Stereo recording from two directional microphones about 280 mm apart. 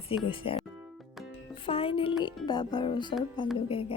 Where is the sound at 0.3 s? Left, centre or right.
Centre.